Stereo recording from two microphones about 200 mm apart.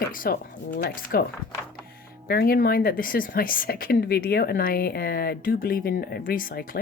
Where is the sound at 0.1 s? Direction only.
45° left (ahead or behind).